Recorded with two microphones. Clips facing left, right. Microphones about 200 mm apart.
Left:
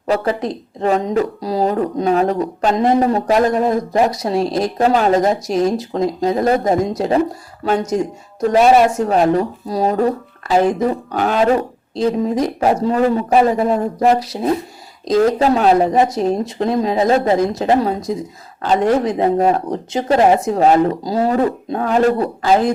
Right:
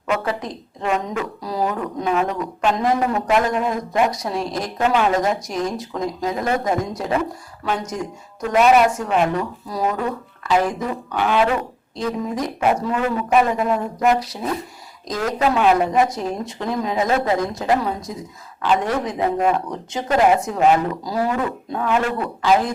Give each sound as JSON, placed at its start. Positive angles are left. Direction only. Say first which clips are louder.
{"t": 0.8, "sound": "a woman's voice", "louder": "left 7 dB", "side_deg": 35}